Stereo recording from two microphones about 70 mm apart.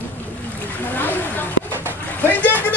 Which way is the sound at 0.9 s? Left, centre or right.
Left.